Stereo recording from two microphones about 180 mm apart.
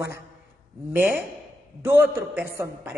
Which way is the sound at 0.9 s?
10° right (ahead or behind).